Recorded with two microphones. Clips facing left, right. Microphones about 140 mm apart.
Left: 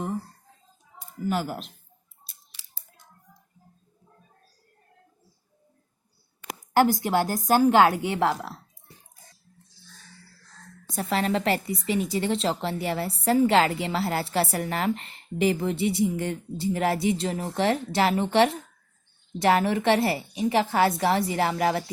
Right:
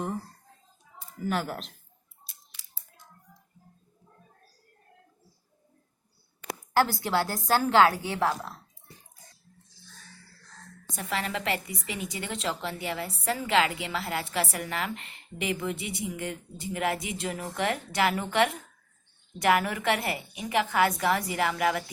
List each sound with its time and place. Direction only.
1.3 s speech: 5° left (ahead or behind)
6.7 s a woman's voice: 15° left (ahead or behind)
10.9 s a woman's voice: 35° left (ahead or behind)